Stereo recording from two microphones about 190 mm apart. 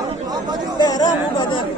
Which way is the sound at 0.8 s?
20° left (ahead or behind).